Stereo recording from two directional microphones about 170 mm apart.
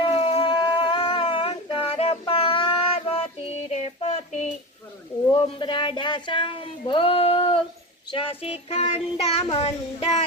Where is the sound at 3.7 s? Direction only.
40° left (ahead or behind).